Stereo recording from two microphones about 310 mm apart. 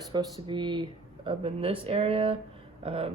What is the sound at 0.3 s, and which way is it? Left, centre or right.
Speech, centre.